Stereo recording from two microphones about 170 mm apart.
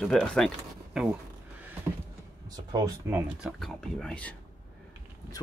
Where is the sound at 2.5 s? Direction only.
20° right (ahead or behind).